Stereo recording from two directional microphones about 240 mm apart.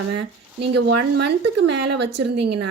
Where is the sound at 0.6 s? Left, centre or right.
Right.